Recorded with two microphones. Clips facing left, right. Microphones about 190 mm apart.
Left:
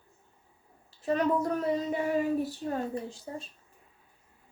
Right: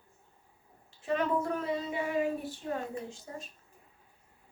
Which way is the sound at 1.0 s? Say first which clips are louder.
Left 3 dB; 40° left (ahead or behind).